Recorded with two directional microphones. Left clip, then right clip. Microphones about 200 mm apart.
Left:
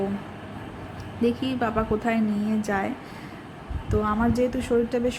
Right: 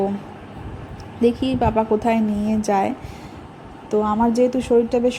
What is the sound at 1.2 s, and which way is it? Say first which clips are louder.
A woman's voice: right 6 dB; 15° right (ahead or behind).